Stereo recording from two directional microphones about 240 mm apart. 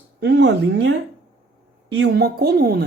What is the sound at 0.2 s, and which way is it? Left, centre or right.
A man's voice, right.